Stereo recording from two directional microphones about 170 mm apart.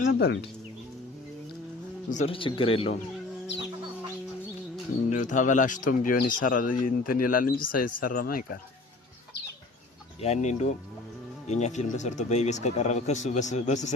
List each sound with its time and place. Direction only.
0.0 s speech: 75° left (ahead or behind)
2.1 s speech: 35° left (ahead or behind)
5.0 s speech: 50° left (ahead or behind)
10.2 s speech: 40° left (ahead or behind)